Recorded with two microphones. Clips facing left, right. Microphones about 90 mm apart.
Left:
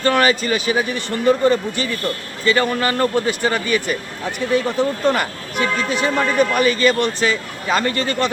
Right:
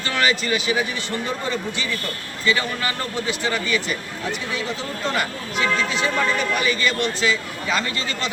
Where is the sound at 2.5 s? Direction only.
45° left (ahead or behind).